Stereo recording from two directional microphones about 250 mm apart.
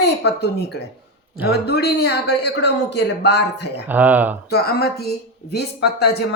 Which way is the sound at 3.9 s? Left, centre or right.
Centre.